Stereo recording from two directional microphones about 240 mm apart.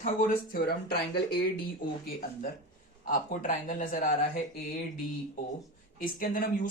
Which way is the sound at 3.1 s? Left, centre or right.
Left.